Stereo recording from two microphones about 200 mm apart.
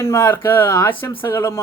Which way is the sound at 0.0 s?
15° left (ahead or behind).